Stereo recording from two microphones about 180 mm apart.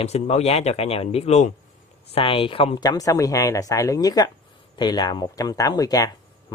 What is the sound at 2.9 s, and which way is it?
Speech, 20° left (ahead or behind).